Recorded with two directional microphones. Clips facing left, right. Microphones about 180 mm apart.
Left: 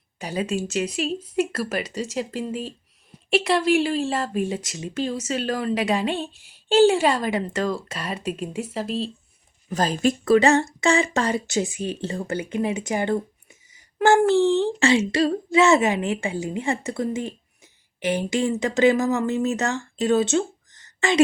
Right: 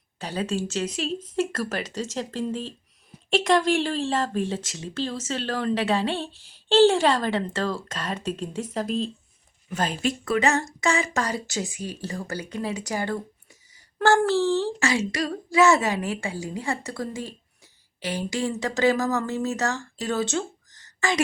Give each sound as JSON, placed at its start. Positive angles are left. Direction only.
{"t": 0.2, "sound": "speech", "side_deg": 10}
{"t": 9.6, "sound": "speech", "side_deg": 40}